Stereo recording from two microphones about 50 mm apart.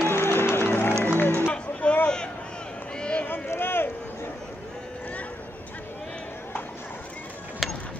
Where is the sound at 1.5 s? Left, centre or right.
Left.